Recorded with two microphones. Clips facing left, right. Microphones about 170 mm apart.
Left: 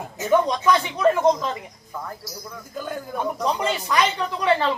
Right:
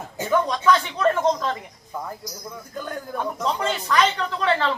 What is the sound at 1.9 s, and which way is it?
Speech, 15° right (ahead or behind).